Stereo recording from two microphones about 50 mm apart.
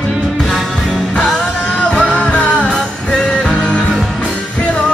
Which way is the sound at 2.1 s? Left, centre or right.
Left.